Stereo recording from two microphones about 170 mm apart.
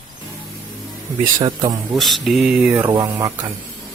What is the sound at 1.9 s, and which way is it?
Speech, centre (ahead or behind).